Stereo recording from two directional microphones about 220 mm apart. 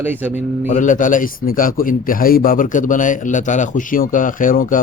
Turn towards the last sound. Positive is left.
turn(degrees=40)  # may be behind; listen again after turning